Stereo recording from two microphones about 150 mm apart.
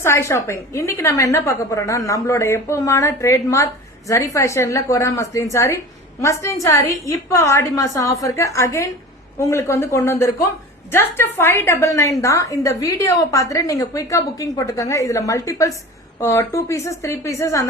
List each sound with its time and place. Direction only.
0.0 s a woman's voice: 20° left (ahead or behind)